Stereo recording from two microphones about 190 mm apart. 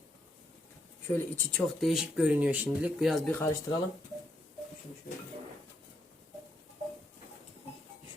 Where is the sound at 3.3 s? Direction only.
15° left (ahead or behind).